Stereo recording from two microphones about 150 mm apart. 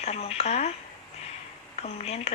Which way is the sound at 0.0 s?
45° left (ahead or behind).